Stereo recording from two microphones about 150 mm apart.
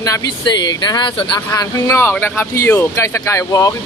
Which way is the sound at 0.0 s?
25° left (ahead or behind).